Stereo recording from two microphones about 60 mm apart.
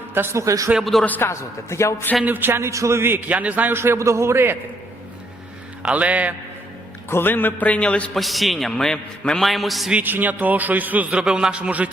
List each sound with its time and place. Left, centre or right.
0.1 s a man's voice: right
0.3 s a man's voice: right
1.2 s a man's voice: left
2.2 s speech: right
3.0 s a man's voice: right
3.2 s a man's voice: right
3.7 s a man's voice: right
3.9 s speech: right
5.9 s a man's voice: right
7.1 s speech: left
7.7 s a man's voice: left
8.1 s a man's voice: centre
10.0 s a man's voice: right